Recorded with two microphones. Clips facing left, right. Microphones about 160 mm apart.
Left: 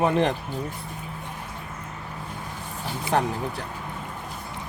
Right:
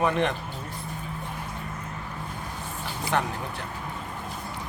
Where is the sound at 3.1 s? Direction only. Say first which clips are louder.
Left 4 dB; 35° left (ahead or behind).